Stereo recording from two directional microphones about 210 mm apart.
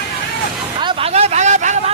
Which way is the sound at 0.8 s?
30° right (ahead or behind).